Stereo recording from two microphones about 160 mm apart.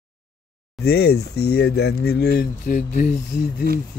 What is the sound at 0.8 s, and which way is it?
Speech, 85° left.